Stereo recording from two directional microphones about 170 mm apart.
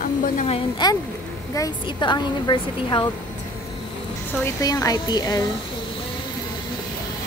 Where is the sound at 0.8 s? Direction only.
25° left (ahead or behind).